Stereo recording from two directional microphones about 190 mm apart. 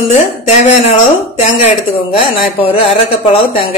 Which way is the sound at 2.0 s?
30° left (ahead or behind).